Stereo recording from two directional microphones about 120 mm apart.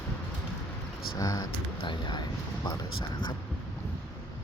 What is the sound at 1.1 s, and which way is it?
Speech, 30° left (ahead or behind).